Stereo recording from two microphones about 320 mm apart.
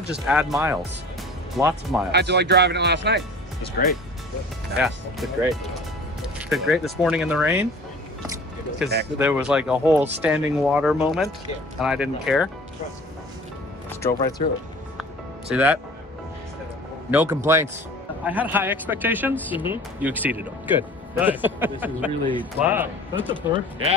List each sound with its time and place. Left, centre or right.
0.1 s speech: centre
2.1 s speech: right
3.8 s speech: left
4.7 s speech: centre
9.2 s speech: centre
13.8 s music: centre
15.5 s speech: centre
17.1 s speech: centre